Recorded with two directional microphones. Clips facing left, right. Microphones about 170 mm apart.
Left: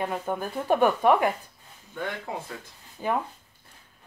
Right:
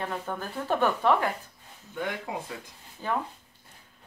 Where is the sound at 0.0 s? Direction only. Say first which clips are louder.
Left 4 dB; 15° left (ahead or behind).